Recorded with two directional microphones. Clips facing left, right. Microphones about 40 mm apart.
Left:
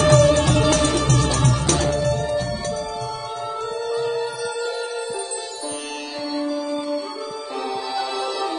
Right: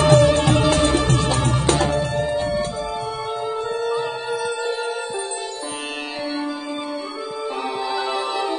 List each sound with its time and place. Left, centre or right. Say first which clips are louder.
0.0 s music: right 1 dB; right
7.9 s music: right 2 dB; right